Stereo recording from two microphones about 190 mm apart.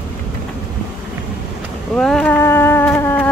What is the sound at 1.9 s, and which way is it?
Speech, 5° left (ahead or behind).